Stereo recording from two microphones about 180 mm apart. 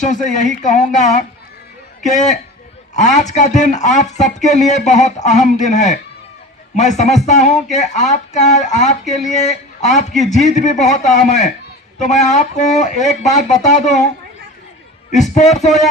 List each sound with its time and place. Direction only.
0.0 s a man's voice: 45° left (ahead or behind)
15.1 s a man's voice: 40° left (ahead or behind)